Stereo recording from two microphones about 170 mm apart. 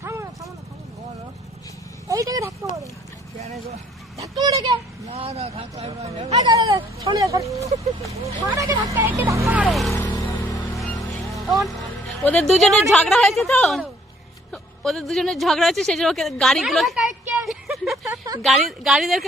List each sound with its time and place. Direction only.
0.0 s vehicle: 15° right (ahead or behind)
2.0 s vehicle: 20° right (ahead or behind)
3.4 s speech: 40° right (ahead or behind)
4.2 s a sound: 20° right (ahead or behind)
5.0 s speech: 35° right (ahead or behind)
6.3 s speech: 20° right (ahead or behind)
9.5 s speech: centre (ahead or behind)
9.9 s music: 15° left (ahead or behind)
10.8 s a sound: centre (ahead or behind)
11.6 s a woman's voice: centre (ahead or behind)
17.5 s vehicle: centre (ahead or behind)
18.0 s a sound: 20° right (ahead or behind)
18.4 s speech: centre (ahead or behind)